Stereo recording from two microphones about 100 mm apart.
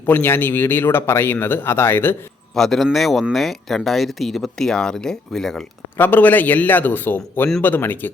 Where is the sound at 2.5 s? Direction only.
5° left (ahead or behind).